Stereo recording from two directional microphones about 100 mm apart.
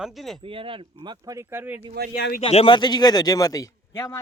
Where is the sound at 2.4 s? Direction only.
80° left.